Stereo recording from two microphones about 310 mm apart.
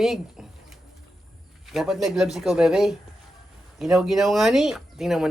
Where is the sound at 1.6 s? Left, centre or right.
Centre.